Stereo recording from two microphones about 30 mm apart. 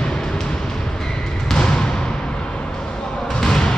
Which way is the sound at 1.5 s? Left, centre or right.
Left.